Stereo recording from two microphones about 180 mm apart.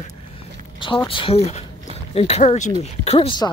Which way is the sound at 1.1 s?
30° left (ahead or behind).